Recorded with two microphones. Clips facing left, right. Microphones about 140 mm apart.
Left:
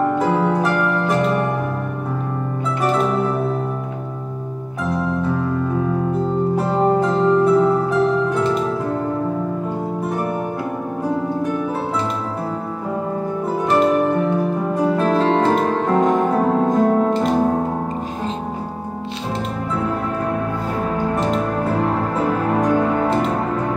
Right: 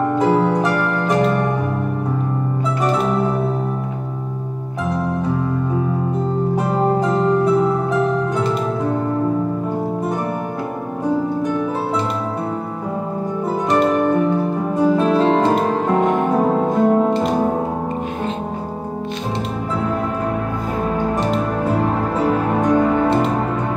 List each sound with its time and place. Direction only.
0.2 s harp: centre (ahead or behind)
6.5 s music: centre (ahead or behind)
14.8 s music: centre (ahead or behind)
22.1 s music: centre (ahead or behind)